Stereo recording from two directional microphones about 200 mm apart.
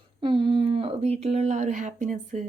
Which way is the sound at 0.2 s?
25° right (ahead or behind).